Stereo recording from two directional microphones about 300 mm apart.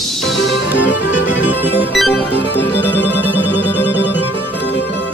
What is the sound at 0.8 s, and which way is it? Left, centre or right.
Music, left.